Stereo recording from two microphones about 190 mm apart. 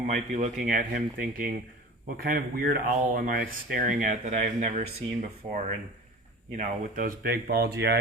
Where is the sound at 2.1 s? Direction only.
50° right (ahead or behind).